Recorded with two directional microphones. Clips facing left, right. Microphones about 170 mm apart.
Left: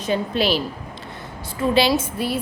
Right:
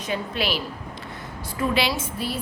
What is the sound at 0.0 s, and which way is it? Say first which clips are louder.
Speech: left 6 dB; 30° left (ahead or behind).